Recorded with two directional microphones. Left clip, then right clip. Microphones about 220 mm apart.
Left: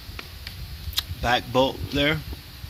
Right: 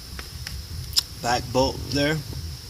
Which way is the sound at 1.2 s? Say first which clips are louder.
Left 3 dB; 10° left (ahead or behind).